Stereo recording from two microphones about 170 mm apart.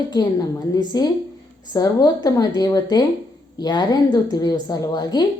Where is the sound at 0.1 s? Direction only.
20° left (ahead or behind).